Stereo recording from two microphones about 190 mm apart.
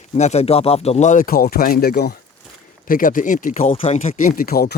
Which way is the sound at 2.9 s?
45° left (ahead or behind).